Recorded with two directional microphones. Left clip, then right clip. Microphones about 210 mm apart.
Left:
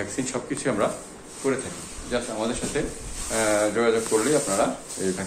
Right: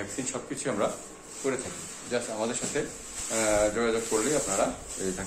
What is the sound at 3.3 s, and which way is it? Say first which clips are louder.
Speech: left 3 dB; centre (ahead or behind).